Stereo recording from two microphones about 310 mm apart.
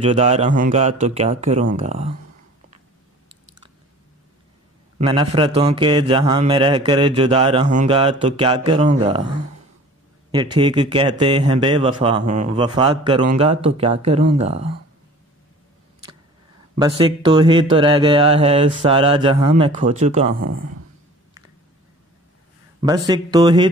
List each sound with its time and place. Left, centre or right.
0.0 s speech: right
4.9 s speech: centre
10.6 s speech: centre
16.7 s speech: centre
22.8 s speech: centre